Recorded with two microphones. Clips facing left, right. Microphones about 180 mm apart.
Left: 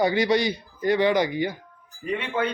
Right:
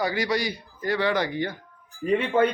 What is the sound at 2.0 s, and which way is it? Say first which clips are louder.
Speech: right 5 dB; 40° right (ahead or behind).